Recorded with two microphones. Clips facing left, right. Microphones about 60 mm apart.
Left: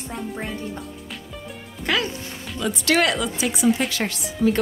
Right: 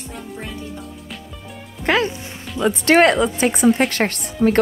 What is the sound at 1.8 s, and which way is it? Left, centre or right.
Speech, right.